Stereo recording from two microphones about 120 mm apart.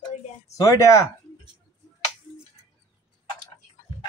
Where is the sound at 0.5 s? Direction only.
30° left (ahead or behind).